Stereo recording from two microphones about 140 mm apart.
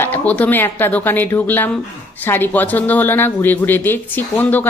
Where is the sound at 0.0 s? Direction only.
10° left (ahead or behind).